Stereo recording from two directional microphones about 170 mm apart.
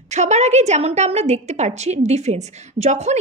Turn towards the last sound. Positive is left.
turn(degrees=-40)  # may be behind; listen again after turning